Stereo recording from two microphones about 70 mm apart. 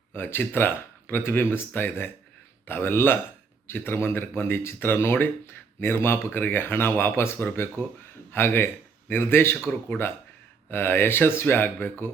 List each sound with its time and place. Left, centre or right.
0.2 s a man's voice: left
10.7 s speech: left